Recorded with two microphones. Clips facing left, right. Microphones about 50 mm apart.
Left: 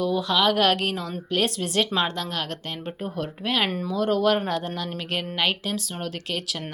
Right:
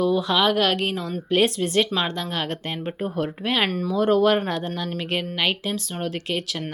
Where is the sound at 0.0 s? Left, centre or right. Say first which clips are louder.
Right 2 dB; centre.